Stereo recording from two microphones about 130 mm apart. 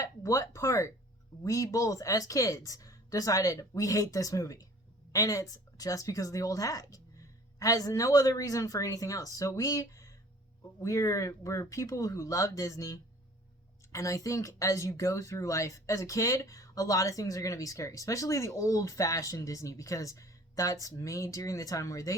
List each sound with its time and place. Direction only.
0.0 s speech: 25° left (ahead or behind)